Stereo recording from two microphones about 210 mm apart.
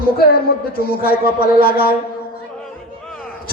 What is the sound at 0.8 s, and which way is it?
A man's voice, 45° left (ahead or behind).